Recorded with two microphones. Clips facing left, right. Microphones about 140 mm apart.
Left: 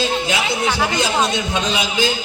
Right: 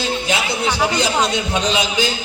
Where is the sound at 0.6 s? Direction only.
15° right (ahead or behind).